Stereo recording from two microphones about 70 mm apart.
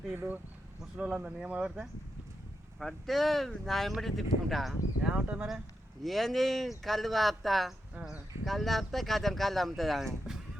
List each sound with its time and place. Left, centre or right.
0.1 s speech: right
0.8 s speech: centre
2.7 s speech: centre
5.0 s speech: centre
6.0 s speech: centre